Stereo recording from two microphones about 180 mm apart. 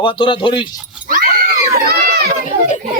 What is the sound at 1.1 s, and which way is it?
Roaring cats, 50° right (ahead or behind).